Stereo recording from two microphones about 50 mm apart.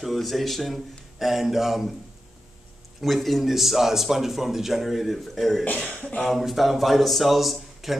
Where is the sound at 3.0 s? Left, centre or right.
Centre.